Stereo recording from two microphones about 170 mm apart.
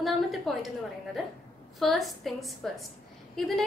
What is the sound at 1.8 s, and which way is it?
A woman's voice, centre (ahead or behind).